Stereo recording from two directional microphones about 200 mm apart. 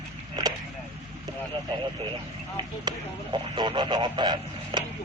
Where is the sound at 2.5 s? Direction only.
25° right (ahead or behind).